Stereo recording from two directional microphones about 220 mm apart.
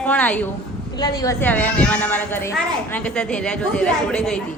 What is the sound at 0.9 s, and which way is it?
A woman's voice, 15° left (ahead or behind).